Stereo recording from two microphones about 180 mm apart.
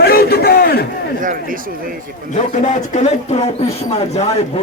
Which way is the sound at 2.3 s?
45° left (ahead or behind).